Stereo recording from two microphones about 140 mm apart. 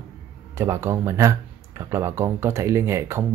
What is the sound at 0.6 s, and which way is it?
Speech, 20° right (ahead or behind).